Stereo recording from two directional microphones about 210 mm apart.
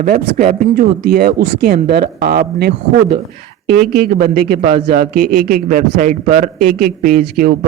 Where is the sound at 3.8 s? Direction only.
50° right (ahead or behind).